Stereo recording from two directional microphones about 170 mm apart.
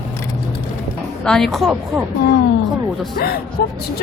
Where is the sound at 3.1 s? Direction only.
65° left (ahead or behind).